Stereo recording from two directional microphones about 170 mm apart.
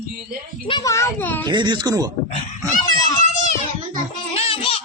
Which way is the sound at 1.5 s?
25° right (ahead or behind).